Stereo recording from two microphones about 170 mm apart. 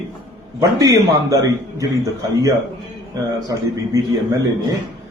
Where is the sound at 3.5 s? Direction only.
20° right (ahead or behind).